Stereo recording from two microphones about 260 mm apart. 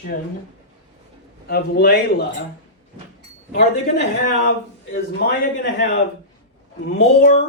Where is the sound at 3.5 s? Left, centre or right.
Left.